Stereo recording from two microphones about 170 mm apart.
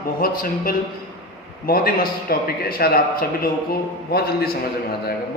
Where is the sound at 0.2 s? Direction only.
55° left (ahead or behind).